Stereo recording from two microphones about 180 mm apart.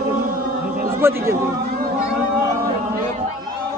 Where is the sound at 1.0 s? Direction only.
15° right (ahead or behind).